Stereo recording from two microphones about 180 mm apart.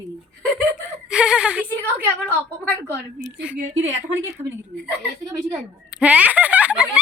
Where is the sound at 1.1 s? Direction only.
5° right (ahead or behind).